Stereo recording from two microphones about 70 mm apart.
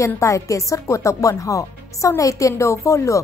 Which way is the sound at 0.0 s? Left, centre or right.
Left.